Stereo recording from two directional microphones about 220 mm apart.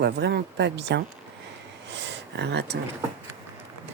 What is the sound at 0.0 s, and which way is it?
Speech, 50° right (ahead or behind).